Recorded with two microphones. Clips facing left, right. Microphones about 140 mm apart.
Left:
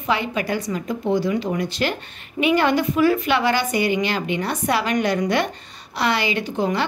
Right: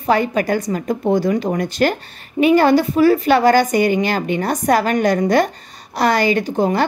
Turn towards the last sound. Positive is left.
turn(degrees=-40)  # may be behind; listen again after turning